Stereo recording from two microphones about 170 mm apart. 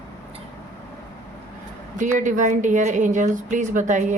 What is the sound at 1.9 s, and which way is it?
A woman's voice, 50° right (ahead or behind).